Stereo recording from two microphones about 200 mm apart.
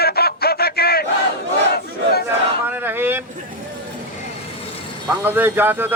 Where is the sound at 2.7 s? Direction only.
10° right (ahead or behind).